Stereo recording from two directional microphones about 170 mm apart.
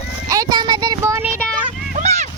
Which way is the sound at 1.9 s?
45° right (ahead or behind).